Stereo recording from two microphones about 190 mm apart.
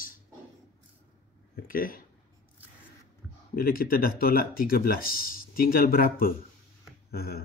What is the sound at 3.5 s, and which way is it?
Speech, 50° left (ahead or behind).